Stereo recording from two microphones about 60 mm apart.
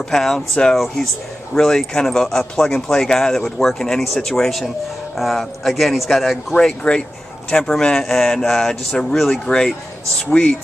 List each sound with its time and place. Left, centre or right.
0.1 s speech: centre
6.6 s speech: centre
10.3 s speech: centre